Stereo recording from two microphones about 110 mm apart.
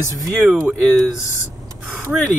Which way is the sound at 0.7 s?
5° left (ahead or behind).